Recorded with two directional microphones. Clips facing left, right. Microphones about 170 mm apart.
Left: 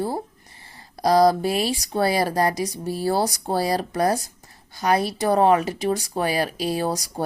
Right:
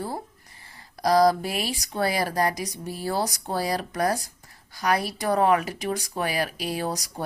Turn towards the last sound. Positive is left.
turn(degrees=30)  # may be behind; listen again after turning